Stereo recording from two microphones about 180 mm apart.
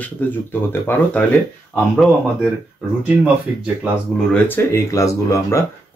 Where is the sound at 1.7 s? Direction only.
Centre (ahead or behind).